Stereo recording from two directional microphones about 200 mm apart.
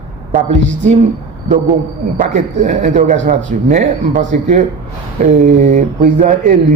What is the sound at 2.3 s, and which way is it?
Speech, 35° right (ahead or behind).